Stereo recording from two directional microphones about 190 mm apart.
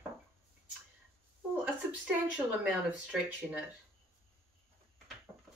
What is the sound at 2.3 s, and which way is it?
Speech, 5° right (ahead or behind).